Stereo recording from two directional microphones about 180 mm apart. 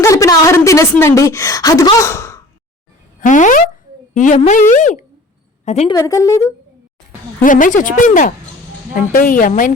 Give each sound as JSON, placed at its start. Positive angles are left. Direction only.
{"t": 0.0, "sound": "a woman's voice", "side_deg": 15}
{"t": 3.2, "sound": "a sound", "side_deg": 45}
{"t": 4.1, "sound": "a woman's voice", "side_deg": 45}
{"t": 5.9, "sound": "a woman's voice", "side_deg": 15}
{"t": 7.4, "sound": "a woman's voice", "side_deg": 45}